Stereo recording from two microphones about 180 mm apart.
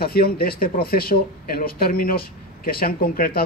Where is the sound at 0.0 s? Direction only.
55° left (ahead or behind).